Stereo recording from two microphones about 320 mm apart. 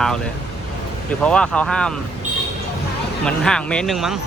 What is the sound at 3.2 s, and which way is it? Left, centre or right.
Speech, centre.